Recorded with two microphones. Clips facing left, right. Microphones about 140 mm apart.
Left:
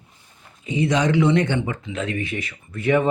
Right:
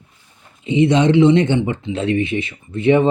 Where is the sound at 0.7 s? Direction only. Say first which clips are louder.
Right 6 dB; 25° right (ahead or behind).